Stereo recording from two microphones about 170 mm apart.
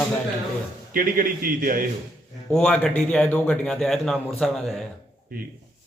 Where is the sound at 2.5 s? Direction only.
5° left (ahead or behind).